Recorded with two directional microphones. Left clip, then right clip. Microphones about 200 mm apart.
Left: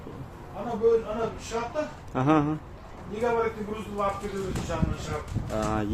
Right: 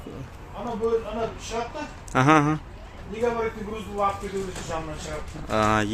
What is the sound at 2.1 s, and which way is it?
Speech, 10° right (ahead or behind).